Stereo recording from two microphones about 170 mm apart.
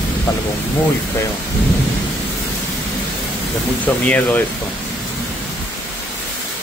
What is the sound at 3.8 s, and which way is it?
Speech, 10° left (ahead or behind).